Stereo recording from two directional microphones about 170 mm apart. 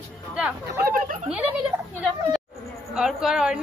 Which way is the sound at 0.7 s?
60° right (ahead or behind).